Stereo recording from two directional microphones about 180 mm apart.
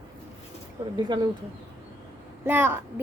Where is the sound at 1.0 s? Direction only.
25° right (ahead or behind).